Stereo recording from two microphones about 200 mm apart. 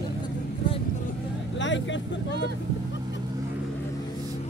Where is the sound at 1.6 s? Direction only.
65° left (ahead or behind).